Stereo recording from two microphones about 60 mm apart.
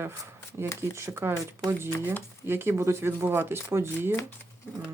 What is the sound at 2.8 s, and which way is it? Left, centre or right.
Speech, right.